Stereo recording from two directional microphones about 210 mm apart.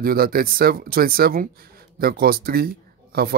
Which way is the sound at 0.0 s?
45° right (ahead or behind).